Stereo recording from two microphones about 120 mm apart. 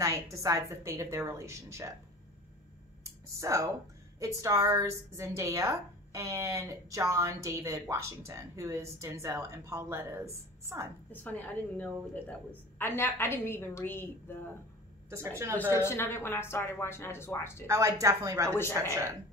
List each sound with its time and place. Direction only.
0.0 s a woman's voice: 25° right (ahead or behind)
3.0 s a sound: 25° right (ahead or behind)
4.2 s a woman's voice: 25° right (ahead or behind)
11.1 s a woman's voice: 15° left (ahead or behind)
15.0 s a woman's voice: 25° right (ahead or behind)
15.8 s a woman's voice: 20° left (ahead or behind)
17.6 s a woman's voice: 25° right (ahead or behind)